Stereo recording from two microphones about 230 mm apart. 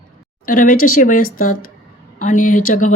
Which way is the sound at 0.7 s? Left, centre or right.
Left.